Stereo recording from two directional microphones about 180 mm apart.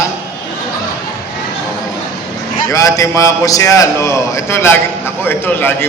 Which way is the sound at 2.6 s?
20° left (ahead or behind).